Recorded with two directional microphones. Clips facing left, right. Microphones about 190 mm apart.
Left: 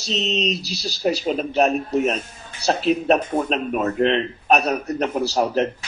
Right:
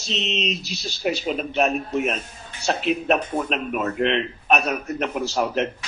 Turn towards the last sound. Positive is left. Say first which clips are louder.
# left 3 dB
turn(degrees=35)  # may be behind; listen again after turning